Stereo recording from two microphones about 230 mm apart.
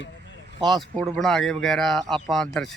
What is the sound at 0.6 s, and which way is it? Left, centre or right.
Speech, centre.